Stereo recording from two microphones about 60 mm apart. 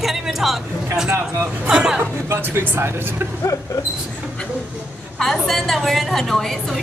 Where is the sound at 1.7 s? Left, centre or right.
Centre.